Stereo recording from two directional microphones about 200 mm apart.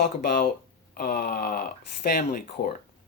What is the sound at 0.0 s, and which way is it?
Speech, 45° left (ahead or behind).